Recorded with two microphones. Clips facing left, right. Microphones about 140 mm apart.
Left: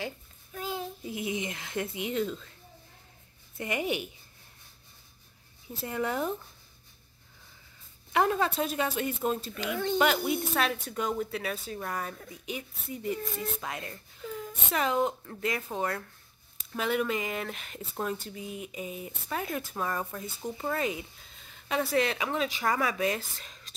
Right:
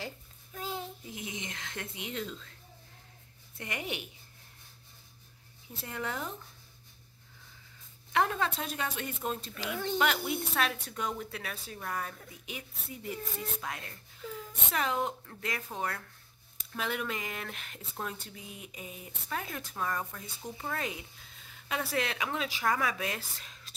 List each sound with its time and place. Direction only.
0.6 s child singing: 25° right (ahead or behind)
1.0 s speech: 5° left (ahead or behind)
3.5 s speech: 5° left (ahead or behind)
5.9 s speech: 10° left (ahead or behind)
8.1 s speech: 5° left (ahead or behind)